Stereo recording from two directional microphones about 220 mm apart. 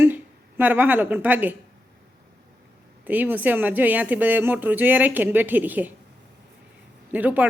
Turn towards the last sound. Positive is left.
turn(degrees=-5)  # may be behind; listen again after turning